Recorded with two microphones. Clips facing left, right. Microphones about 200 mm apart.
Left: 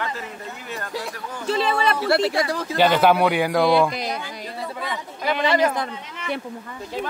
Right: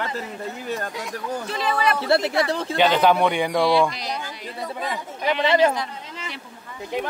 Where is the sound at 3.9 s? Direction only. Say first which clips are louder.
Left 3 dB; 50° left (ahead or behind).